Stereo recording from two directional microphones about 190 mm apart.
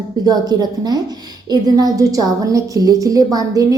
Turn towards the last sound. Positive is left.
turn(degrees=-20)  # may be behind; listen again after turning